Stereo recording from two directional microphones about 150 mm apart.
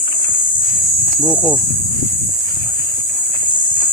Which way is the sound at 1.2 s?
15° left (ahead or behind).